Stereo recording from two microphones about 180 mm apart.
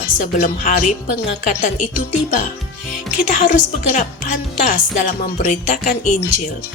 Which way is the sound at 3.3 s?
45° left (ahead or behind).